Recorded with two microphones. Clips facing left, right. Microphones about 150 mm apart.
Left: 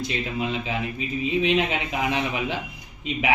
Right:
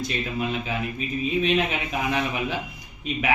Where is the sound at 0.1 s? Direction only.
20° left (ahead or behind).